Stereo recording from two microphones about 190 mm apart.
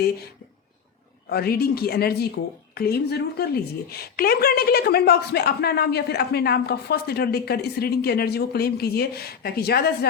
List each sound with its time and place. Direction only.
1.3 s a woman's voice: 55° left (ahead or behind)